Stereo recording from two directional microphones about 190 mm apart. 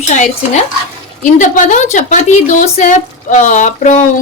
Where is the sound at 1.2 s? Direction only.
40° left (ahead or behind).